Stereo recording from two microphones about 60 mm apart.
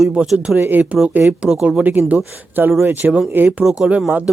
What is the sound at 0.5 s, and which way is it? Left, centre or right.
Speech, right.